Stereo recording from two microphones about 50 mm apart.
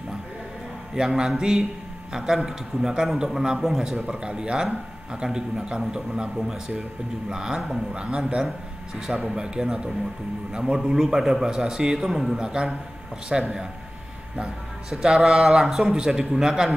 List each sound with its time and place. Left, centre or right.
0.9 s a man's voice: centre
4.0 s speech: right
9.2 s speech: centre
12.4 s speech: centre
14.9 s speech: centre